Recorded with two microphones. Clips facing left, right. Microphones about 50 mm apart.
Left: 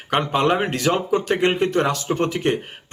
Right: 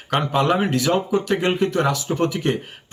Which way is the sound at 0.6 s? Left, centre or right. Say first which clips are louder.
Right 1 dB; left.